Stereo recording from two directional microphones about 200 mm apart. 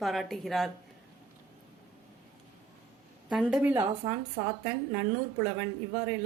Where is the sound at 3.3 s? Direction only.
Centre (ahead or behind).